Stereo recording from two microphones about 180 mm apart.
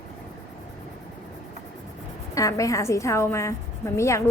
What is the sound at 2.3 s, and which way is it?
A woman's voice, 20° left (ahead or behind).